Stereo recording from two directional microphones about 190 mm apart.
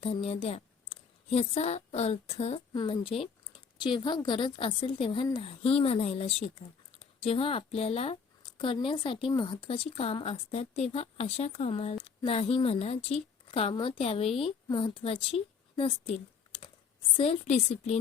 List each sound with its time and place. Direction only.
0.0 s a woman's voice: 30° left (ahead or behind)